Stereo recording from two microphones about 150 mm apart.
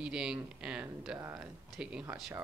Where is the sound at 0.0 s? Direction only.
5° right (ahead or behind).